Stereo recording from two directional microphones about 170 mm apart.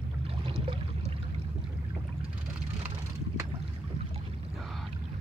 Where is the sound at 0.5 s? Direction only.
35° right (ahead or behind).